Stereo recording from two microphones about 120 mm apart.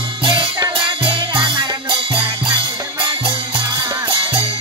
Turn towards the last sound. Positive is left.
turn(degrees=-45)  # may be behind; listen again after turning